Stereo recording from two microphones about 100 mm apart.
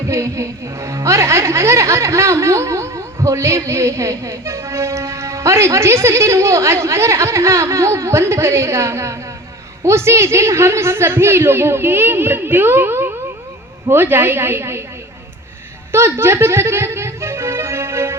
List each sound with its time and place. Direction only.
0.1 s speech: 30° right (ahead or behind)
15.9 s music: 25° right (ahead or behind)